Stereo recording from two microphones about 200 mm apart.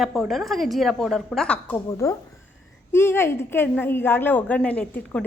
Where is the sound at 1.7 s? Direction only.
15° left (ahead or behind).